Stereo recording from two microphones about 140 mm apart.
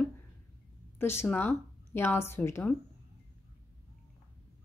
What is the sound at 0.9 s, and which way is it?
Speech, 15° left (ahead or behind).